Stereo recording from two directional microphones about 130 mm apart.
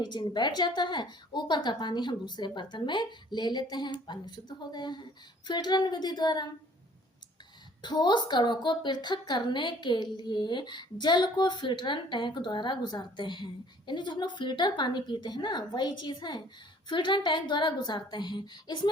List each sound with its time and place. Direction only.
0.0 s a woman's voice: 35° left (ahead or behind)
7.8 s a woman's voice: 35° left (ahead or behind)